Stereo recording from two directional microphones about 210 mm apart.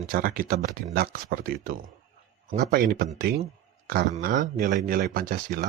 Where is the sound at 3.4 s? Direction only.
45° right (ahead or behind).